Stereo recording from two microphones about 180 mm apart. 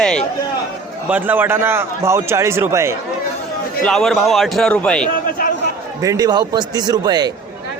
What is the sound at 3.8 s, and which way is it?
A man's voice, centre (ahead or behind).